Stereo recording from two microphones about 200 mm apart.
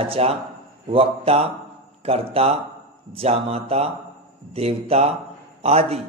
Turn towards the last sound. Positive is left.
turn(degrees=-30)  # may be behind; listen again after turning